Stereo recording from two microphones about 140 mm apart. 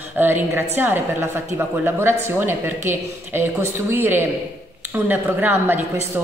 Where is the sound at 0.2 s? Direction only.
15° right (ahead or behind).